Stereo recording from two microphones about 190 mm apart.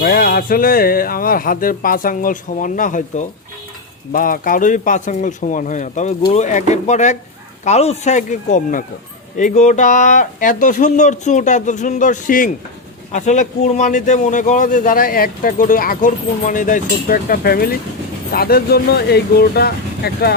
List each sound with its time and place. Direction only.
0.0 s speech: 50° left (ahead or behind)